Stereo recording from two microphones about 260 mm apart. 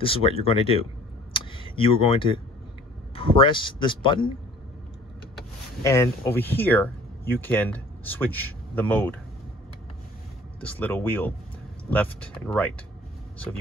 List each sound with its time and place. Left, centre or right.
0.0 s speech: left
1.3 s a sound: centre
3.2 s speech: centre
5.9 s speech: centre
10.6 s speech: centre